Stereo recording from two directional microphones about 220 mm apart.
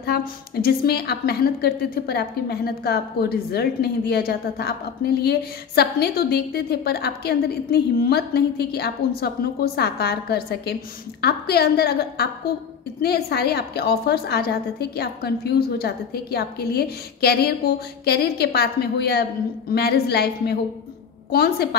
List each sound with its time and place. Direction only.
0.0 s a woman's voice: 45° left (ahead or behind)